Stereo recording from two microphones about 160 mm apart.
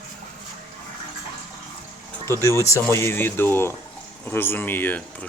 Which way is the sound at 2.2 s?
15° left (ahead or behind).